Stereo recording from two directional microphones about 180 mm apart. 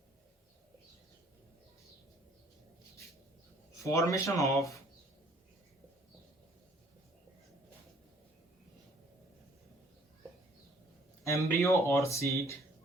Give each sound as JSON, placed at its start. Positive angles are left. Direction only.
{"t": 3.8, "sound": "speech", "side_deg": 15}
{"t": 11.2, "sound": "speech", "side_deg": 15}